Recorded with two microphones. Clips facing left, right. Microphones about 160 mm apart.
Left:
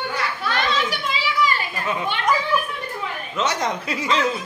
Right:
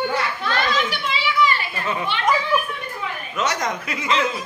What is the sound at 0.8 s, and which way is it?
Children playing, 40° left (ahead or behind).